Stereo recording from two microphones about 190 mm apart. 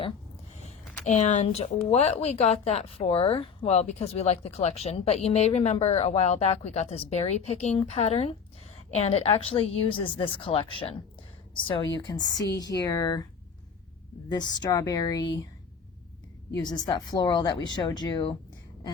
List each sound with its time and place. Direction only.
0.6 s a sound: 40° left (ahead or behind)
1.9 s a woman's voice: 35° left (ahead or behind)
11.9 s a woman's voice: 20° left (ahead or behind)
14.3 s a woman's voice: 20° left (ahead or behind)
16.6 s a woman's voice: 20° left (ahead or behind)